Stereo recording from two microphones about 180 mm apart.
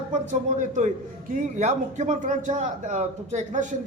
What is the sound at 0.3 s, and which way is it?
Speech, 45° right (ahead or behind).